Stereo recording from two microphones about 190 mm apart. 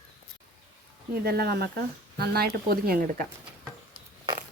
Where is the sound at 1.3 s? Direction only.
55° right (ahead or behind).